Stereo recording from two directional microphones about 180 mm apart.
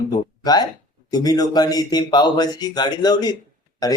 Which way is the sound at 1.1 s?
20° left (ahead or behind).